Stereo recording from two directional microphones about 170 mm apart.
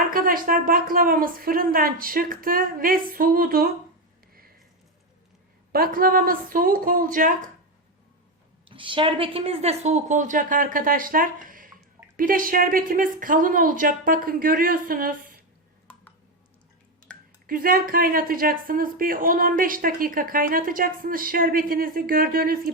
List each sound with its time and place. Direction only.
0.1 s speech: 55° right (ahead or behind)
5.7 s speech: 60° right (ahead or behind)
8.7 s a woman's voice: 30° right (ahead or behind); by 15.1 s 55° right (ahead or behind)
17.4 s speech: 55° right (ahead or behind)